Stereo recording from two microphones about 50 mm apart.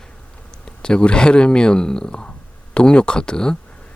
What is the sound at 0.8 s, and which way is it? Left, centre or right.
Speech, centre.